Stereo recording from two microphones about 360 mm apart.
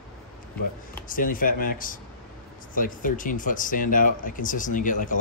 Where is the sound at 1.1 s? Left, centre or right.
Left.